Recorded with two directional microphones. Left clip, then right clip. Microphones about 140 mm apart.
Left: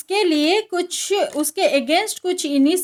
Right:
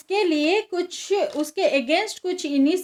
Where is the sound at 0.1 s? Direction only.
50° left (ahead or behind).